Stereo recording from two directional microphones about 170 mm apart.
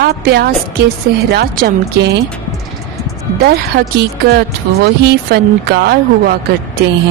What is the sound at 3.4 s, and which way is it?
Speech, 70° right (ahead or behind).